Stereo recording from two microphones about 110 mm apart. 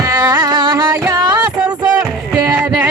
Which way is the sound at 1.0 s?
30° right (ahead or behind).